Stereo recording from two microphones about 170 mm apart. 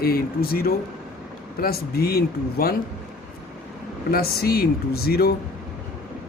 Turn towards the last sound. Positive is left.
turn(degrees=65)  # may be behind; listen again after turning